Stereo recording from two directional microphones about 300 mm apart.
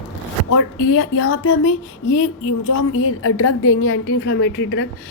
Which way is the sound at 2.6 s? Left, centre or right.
Left.